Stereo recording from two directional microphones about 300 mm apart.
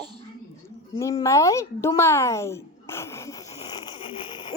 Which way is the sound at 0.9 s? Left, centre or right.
Centre.